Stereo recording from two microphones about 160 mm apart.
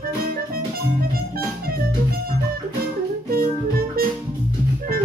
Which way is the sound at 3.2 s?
70° right (ahead or behind).